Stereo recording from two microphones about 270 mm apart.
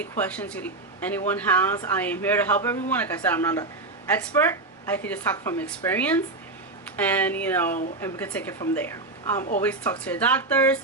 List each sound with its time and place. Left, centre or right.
0.0 s speech: centre